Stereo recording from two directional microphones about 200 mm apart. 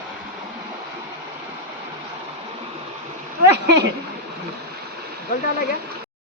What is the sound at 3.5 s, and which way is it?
Speech, 60° right (ahead or behind).